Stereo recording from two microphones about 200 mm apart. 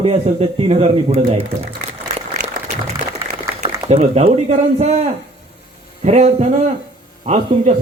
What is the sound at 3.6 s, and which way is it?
A man's voice, 30° right (ahead or behind).